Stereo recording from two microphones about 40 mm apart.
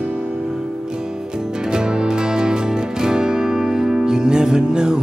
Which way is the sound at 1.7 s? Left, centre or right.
Centre.